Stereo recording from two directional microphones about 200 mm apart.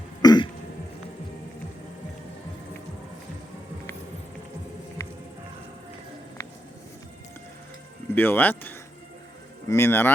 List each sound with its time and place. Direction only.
0.2 s cough: 20° left (ahead or behind)
8.1 s speech: 10° left (ahead or behind)